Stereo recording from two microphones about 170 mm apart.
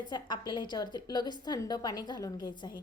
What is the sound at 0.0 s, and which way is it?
A woman's voice, 25° left (ahead or behind).